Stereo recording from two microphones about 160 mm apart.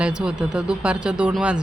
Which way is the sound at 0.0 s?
5° right (ahead or behind).